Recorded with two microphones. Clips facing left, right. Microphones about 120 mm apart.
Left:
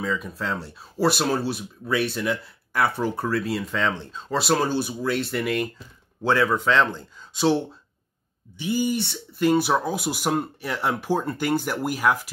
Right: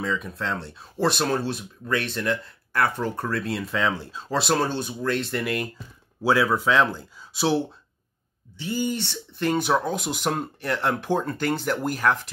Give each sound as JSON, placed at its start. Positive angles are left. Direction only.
{"t": 0.0, "sound": "speech", "side_deg": 0}
{"t": 8.5, "sound": "speech", "side_deg": 10}